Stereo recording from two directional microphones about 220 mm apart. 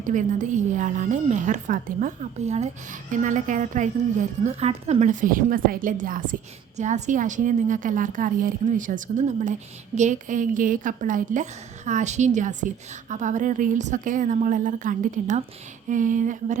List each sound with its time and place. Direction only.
0.0 s a woman's voice: 35° right (ahead or behind)